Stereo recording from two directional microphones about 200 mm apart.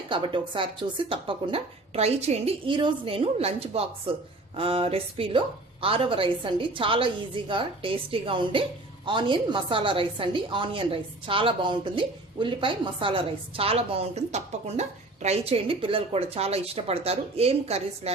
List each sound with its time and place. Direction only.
0.1 s a woman's voice: 25° right (ahead or behind)